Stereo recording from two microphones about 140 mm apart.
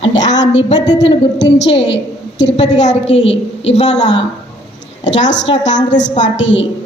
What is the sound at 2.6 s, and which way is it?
A woman's voice, 55° left (ahead or behind).